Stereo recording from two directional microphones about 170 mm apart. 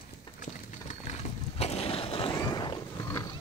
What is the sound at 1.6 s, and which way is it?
Skateboard, 35° left (ahead or behind).